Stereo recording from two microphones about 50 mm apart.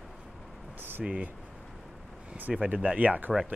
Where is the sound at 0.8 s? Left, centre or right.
Right.